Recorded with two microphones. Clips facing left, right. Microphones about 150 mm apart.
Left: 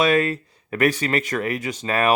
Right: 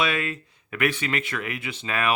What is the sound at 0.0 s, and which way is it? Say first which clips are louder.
Speech: left 7 dB; 40° left (ahead or behind).